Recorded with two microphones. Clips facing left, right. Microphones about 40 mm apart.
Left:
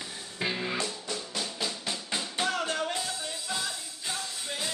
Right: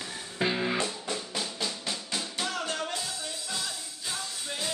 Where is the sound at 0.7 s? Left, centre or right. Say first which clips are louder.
Right 2 dB; right.